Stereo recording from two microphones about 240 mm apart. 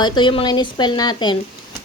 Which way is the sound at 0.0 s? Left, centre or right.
Centre.